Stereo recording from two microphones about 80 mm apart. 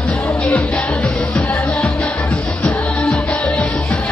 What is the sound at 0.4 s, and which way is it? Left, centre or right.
Music, centre.